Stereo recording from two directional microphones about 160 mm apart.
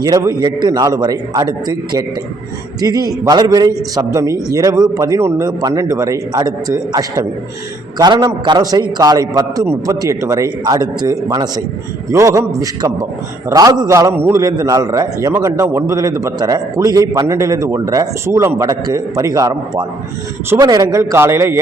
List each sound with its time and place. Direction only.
0.0 s a man's voice: 25° right (ahead or behind)